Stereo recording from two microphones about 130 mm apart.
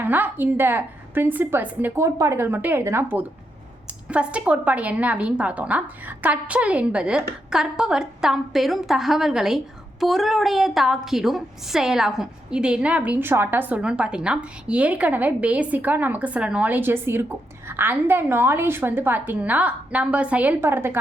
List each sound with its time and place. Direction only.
0.0 s a woman's voice: 15° right (ahead or behind)